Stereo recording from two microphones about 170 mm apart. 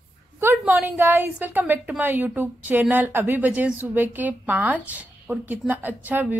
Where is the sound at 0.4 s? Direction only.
15° right (ahead or behind).